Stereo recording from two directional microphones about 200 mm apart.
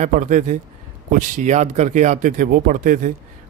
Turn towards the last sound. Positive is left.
turn(degrees=-40)  # may be behind; listen again after turning